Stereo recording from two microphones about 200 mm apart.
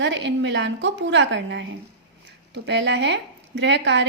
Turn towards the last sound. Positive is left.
turn(degrees=-65)  # may be behind; listen again after turning